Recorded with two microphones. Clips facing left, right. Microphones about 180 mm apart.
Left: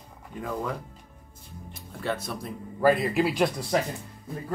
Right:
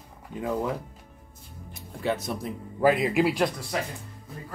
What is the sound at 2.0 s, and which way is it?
Speech, 20° right (ahead or behind).